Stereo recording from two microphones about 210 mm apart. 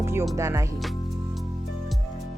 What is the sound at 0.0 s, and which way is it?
Music, 15° right (ahead or behind).